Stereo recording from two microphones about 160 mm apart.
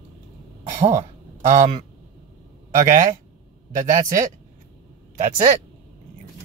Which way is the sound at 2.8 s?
55° right (ahead or behind).